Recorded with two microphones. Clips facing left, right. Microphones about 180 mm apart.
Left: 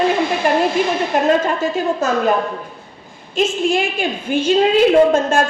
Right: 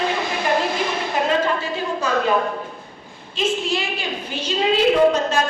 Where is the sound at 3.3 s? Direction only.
50° left (ahead or behind).